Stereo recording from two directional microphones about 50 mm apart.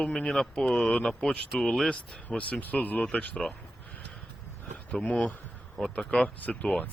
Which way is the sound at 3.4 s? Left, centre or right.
Centre.